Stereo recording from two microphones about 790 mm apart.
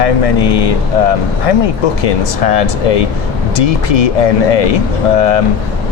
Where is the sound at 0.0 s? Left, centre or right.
Left.